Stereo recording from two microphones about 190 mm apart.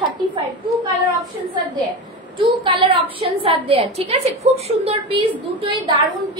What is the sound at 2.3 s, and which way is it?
A woman's voice, 25° right (ahead or behind).